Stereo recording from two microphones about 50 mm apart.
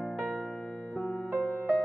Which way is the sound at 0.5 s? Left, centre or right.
Centre.